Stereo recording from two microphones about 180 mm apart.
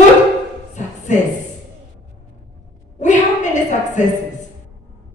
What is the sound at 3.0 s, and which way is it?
A woman's voice, 40° left (ahead or behind).